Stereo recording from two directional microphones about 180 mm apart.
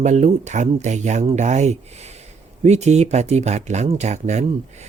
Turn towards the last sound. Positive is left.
turn(degrees=-40)  # may be behind; listen again after turning